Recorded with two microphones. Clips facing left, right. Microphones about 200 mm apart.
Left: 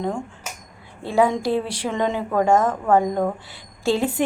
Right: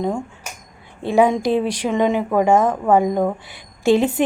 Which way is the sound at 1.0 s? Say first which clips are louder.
Right 3 dB; 20° right (ahead or behind).